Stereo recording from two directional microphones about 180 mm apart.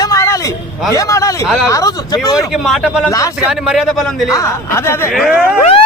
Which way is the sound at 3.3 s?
5° right (ahead or behind).